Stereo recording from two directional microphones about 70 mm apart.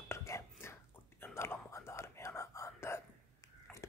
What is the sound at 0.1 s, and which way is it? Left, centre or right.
Whispering, left.